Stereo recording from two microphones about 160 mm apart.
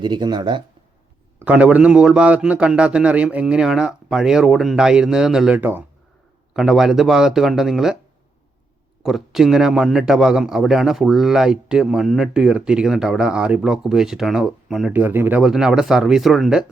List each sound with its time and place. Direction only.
0.0 s speech: 30° right (ahead or behind)
1.4 s a man's voice: 10° right (ahead or behind)
9.0 s a man's voice: centre (ahead or behind)
14.9 s a man's voice: 15° right (ahead or behind)